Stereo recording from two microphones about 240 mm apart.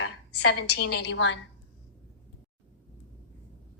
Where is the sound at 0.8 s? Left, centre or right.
Left.